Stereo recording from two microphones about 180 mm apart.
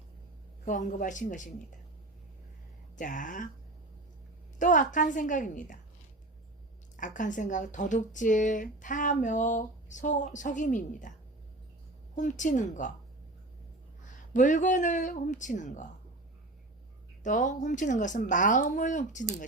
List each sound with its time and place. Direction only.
0.6 s a woman's voice: 45° left (ahead or behind)
2.9 s a woman's voice: 45° left (ahead or behind)
4.5 s a woman's voice: 45° left (ahead or behind)
6.9 s a woman's voice: 45° left (ahead or behind)
12.1 s a woman's voice: 45° left (ahead or behind)
14.0 s a woman's voice: 45° left (ahead or behind)
17.2 s a woman's voice: 45° left (ahead or behind)